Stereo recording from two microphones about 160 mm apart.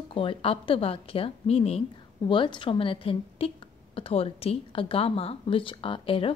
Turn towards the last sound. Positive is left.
turn(degrees=35)  # may be behind; listen again after turning